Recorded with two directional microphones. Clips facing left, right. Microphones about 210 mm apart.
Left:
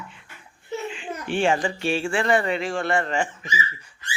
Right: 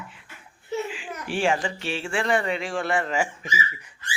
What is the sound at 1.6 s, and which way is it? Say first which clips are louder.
Speech: left 5 dB; 45° left (ahead or behind).